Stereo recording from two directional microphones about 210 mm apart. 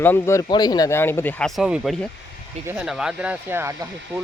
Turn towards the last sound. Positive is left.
turn(degrees=-15)  # may be behind; listen again after turning